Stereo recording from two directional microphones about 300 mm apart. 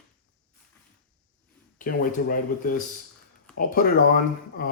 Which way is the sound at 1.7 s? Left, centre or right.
Left.